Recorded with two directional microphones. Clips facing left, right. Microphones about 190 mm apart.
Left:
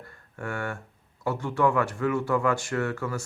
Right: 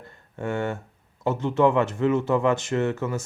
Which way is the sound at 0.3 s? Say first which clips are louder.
Right 6 dB; 20° right (ahead or behind).